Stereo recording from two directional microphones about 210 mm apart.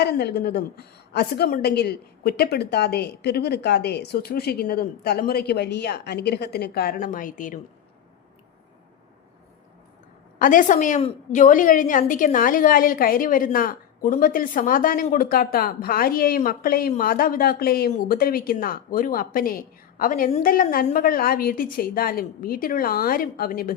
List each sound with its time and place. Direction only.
0.0 s a woman's voice: 50° left (ahead or behind)
10.3 s a woman's voice: 40° left (ahead or behind)